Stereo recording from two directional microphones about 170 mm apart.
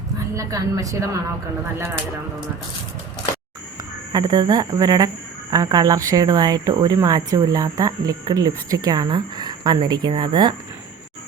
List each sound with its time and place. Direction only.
0.3 s speech: 20° right (ahead or behind)
4.1 s speech: 25° right (ahead or behind)